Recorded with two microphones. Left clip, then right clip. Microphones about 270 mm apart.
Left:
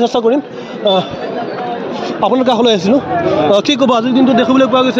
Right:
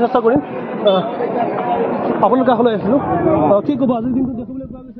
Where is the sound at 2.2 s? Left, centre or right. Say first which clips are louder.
Left 2 dB; left.